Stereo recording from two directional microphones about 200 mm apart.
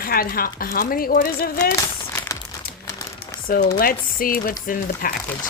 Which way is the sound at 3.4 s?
45° left (ahead or behind).